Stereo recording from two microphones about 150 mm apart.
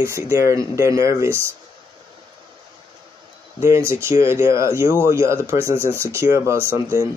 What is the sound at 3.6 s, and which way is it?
Speech, 15° right (ahead or behind).